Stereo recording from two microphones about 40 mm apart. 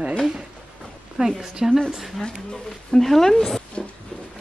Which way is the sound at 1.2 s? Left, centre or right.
Centre.